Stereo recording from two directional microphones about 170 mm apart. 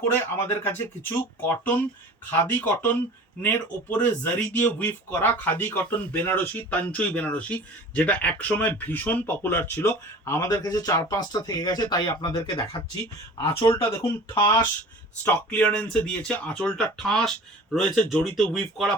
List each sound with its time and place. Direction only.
0.0 s speech: 15° left (ahead or behind)